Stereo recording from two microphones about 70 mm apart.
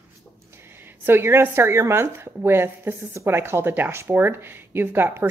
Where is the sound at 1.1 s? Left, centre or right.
Right.